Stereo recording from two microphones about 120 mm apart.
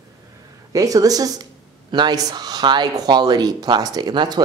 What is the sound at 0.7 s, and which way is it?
Speech, 30° right (ahead or behind).